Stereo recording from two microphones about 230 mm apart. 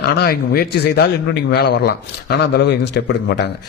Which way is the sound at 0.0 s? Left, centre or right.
Left.